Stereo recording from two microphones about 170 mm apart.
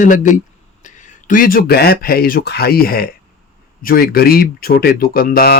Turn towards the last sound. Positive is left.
turn(degrees=65)  # may be behind; listen again after turning